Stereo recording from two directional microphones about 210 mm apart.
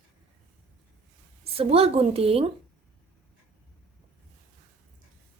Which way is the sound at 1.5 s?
30° right (ahead or behind).